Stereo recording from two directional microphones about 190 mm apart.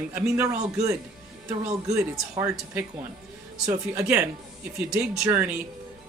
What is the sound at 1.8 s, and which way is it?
Speech, 15° right (ahead or behind).